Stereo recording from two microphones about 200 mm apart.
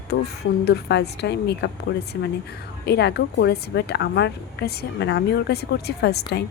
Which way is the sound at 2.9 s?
55° left (ahead or behind).